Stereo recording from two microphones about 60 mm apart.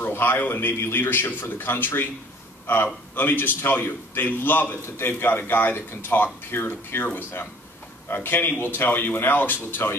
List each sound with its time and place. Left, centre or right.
0.0 s a man's voice: left